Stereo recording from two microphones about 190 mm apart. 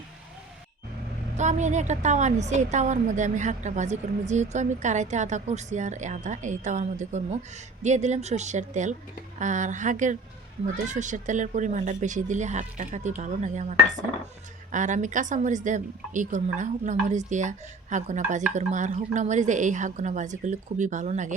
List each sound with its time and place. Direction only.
1.4 s a woman's voice: 40° right (ahead or behind)